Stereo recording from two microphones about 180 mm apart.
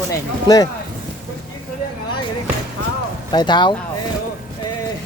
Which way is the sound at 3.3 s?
25° left (ahead or behind).